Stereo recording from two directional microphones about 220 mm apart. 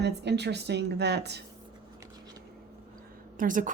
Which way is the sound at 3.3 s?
35° right (ahead or behind).